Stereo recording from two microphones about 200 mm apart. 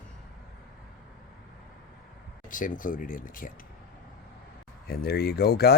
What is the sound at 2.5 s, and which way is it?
Speech, 40° left (ahead or behind).